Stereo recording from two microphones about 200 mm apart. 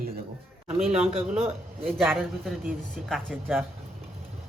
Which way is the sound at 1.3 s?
30° right (ahead or behind).